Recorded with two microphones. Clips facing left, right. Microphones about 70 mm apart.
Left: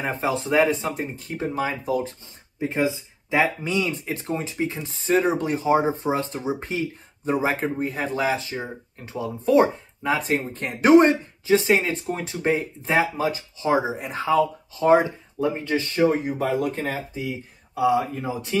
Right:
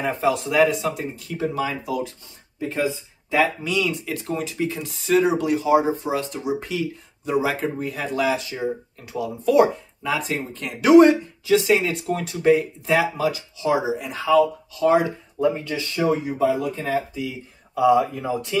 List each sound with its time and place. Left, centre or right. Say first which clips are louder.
0.0 s speech: right 3 dB; left
2.6 s speech: left 1 dB; left
17.1 s speech: even; left